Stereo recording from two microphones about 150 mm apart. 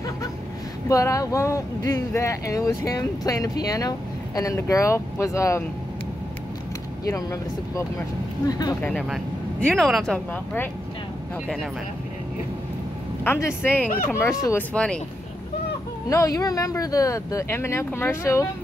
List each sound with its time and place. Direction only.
0.8 s speech: 20° left (ahead or behind)
7.1 s speech: 20° left (ahead or behind)
8.8 s speech: 5° left (ahead or behind)
13.2 s speech: 15° left (ahead or behind)
13.8 s speech: 65° left (ahead or behind)
14.1 s speech: 15° left (ahead or behind)
16.1 s speech: 20° left (ahead or behind)